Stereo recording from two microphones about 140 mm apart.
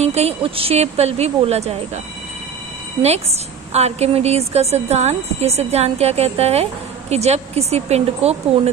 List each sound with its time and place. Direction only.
0.0 s a woman's voice: 50° right (ahead or behind)
3.7 s a woman's voice: 50° right (ahead or behind)